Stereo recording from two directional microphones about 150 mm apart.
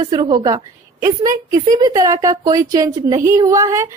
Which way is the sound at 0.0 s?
25° right (ahead or behind).